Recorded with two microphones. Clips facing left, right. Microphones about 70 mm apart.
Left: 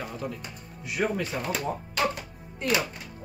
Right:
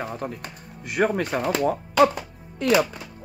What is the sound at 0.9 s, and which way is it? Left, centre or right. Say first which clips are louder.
Speech: right 6 dB; right.